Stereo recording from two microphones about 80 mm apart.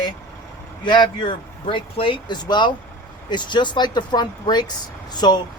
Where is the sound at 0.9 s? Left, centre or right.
Left.